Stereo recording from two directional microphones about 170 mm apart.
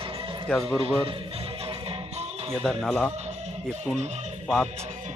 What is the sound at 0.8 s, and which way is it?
Music, 35° right (ahead or behind).